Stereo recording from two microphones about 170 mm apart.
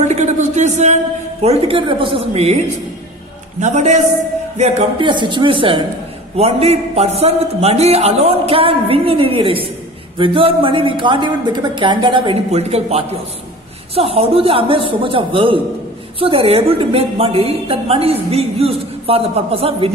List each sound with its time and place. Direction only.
0.0 s a man's voice: 40° right (ahead or behind)
5.0 s a woman's voice: 30° right (ahead or behind)